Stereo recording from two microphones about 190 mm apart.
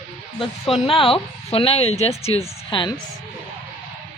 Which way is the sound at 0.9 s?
30° left (ahead or behind).